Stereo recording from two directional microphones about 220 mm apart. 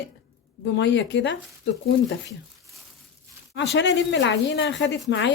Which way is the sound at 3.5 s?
55° left (ahead or behind).